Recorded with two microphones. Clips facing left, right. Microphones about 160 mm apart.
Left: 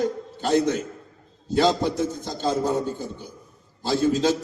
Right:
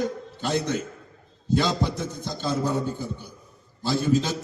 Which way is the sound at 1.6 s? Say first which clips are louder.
Left 8 dB; 45° left (ahead or behind).